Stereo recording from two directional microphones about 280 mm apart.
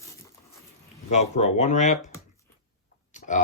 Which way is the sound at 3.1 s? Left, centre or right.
Left.